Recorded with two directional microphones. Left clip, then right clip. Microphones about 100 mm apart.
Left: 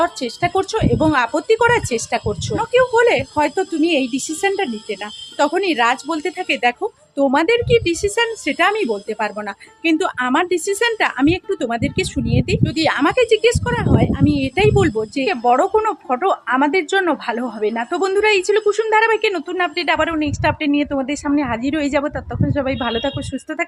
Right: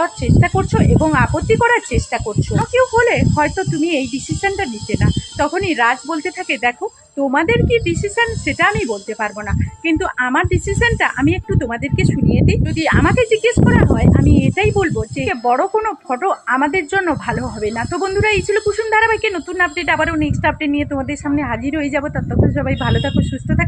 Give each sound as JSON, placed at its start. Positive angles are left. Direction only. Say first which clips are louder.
{"t": 0.0, "sound": "speech", "louder": "right 1 dB", "side_deg": 35}
{"t": 7.4, "sound": "speech", "louder": "even", "side_deg": 45}
{"t": 21.0, "sound": "speech", "louder": "even", "side_deg": 25}
{"t": 21.3, "sound": "speech", "louder": "even", "side_deg": 40}
{"t": 21.6, "sound": "speech", "louder": "left 1 dB", "side_deg": 55}
{"t": 22.5, "sound": "speech", "louder": "even", "side_deg": 40}